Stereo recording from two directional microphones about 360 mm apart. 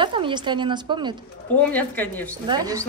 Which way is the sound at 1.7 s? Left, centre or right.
Centre.